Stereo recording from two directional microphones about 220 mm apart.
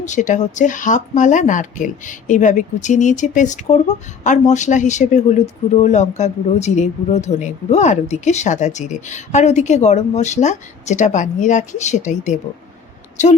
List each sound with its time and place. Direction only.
0.0 s speech: 35° left (ahead or behind)